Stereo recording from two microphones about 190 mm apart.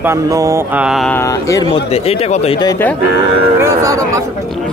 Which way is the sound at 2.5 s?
15° left (ahead or behind).